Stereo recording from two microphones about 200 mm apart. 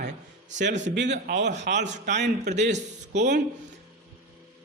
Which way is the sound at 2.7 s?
35° right (ahead or behind).